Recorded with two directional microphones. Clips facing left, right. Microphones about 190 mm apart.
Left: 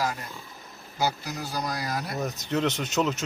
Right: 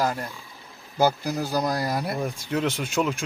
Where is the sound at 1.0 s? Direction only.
55° right (ahead or behind).